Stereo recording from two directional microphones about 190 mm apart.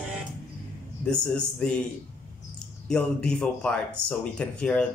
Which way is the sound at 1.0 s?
5° left (ahead or behind).